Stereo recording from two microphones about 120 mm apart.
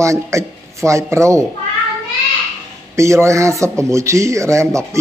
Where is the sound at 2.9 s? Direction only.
25° right (ahead or behind).